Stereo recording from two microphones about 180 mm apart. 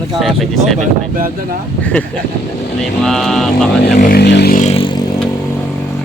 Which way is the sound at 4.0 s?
55° left (ahead or behind).